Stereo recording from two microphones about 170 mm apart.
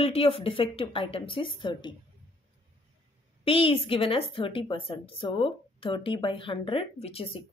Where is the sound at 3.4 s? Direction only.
30° left (ahead or behind).